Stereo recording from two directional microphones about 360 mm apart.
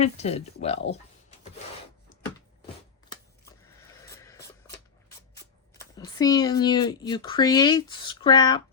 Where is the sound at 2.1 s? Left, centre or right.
Left.